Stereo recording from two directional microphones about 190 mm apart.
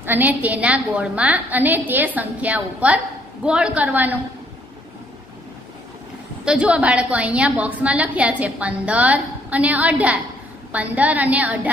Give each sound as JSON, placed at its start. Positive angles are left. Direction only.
{"t": 0.0, "sound": "a woman's voice", "side_deg": -10}
{"t": 6.4, "sound": "a woman's voice", "side_deg": -5}